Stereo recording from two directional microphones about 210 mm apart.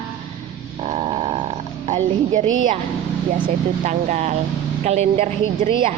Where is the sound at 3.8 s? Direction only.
35° right (ahead or behind).